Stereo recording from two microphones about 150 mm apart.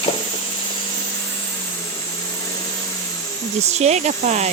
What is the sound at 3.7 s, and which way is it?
Speech, 50° right (ahead or behind).